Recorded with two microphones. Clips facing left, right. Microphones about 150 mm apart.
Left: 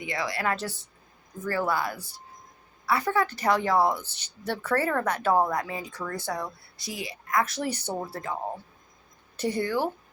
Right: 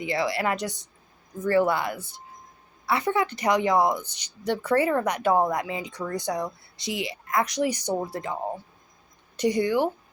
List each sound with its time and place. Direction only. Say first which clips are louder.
0.0 s a woman's voice: right 4 dB; 25° right (ahead or behind)
9.4 s a woman's voice: right 4 dB; 15° right (ahead or behind)